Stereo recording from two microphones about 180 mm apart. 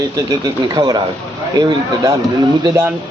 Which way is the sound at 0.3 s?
20° right (ahead or behind).